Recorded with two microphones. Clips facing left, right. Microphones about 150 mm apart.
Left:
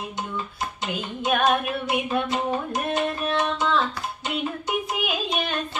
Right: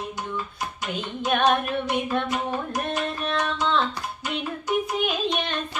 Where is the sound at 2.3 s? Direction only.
20° left (ahead or behind).